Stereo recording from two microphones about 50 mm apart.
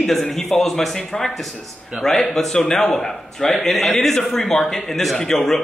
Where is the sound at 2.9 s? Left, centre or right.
Left.